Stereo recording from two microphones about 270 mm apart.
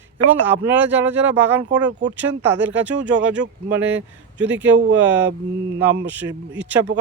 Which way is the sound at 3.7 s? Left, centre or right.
Centre.